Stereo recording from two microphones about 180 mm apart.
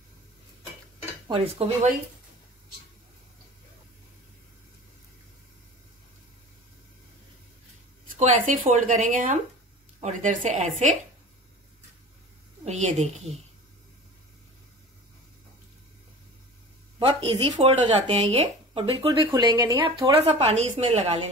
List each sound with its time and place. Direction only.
1.2 s speech: 30° right (ahead or behind)
8.2 s speech: 40° right (ahead or behind)
12.6 s speech: 40° right (ahead or behind)
17.1 s speech: 30° right (ahead or behind)
20.2 s speech: 35° right (ahead or behind)